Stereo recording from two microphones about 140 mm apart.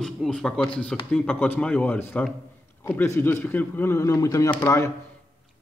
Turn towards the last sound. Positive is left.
turn(degrees=15)  # may be behind; listen again after turning